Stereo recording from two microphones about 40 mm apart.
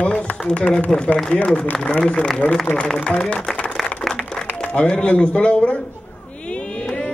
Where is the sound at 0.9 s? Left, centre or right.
Centre.